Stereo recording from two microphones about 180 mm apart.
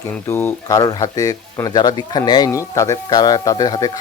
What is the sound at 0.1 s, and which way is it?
Speech, 10° left (ahead or behind).